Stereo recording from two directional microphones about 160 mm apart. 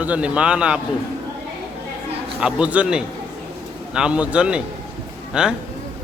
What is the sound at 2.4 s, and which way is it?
A man's voice, 10° right (ahead or behind).